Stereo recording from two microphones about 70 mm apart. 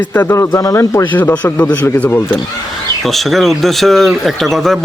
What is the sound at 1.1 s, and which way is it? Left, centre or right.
Speech, left.